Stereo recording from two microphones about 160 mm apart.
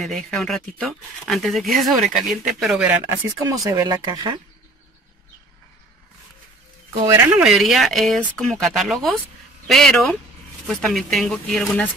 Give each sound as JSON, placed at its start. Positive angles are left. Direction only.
{"t": 0.0, "sound": "speech", "side_deg": 0}
{"t": 3.3, "sound": "speech", "side_deg": -20}
{"t": 7.0, "sound": "speech", "side_deg": -15}
{"t": 7.4, "sound": "speech", "side_deg": 0}